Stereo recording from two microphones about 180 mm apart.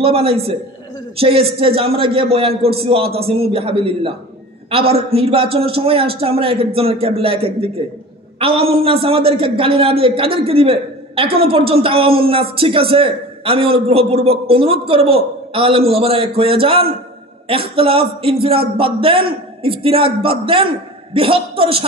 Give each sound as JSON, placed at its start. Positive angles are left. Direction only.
{"t": 0.0, "sound": "a man's voice", "side_deg": -30}